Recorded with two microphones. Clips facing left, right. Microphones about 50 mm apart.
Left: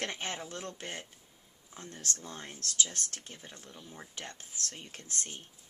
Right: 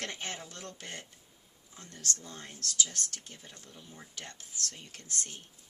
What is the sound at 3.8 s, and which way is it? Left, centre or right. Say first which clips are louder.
Speech: left 2 dB; centre.